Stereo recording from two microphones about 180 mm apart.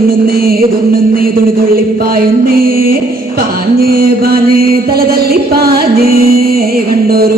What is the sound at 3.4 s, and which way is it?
Mantra, 55° right (ahead or behind).